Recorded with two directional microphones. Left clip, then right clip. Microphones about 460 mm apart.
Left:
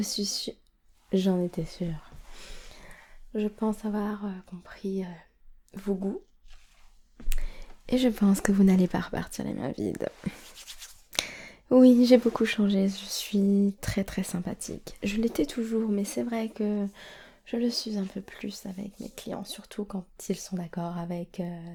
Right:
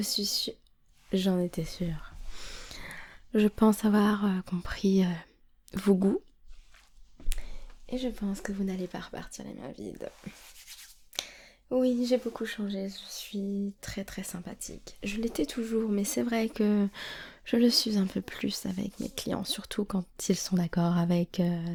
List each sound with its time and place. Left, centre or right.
0.0 s speech: centre
3.3 s speech: right
7.9 s speech: left
11.1 s speech: left
15.0 s speech: centre; by 21.7 s right